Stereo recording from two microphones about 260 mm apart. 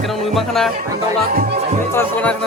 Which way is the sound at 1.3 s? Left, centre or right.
Right.